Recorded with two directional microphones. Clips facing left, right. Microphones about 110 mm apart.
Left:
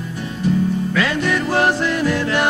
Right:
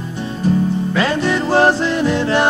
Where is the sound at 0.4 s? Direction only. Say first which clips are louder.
Right 2 dB; 35° right (ahead or behind).